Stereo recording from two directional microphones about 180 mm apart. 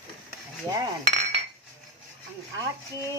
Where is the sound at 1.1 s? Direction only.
40° right (ahead or behind).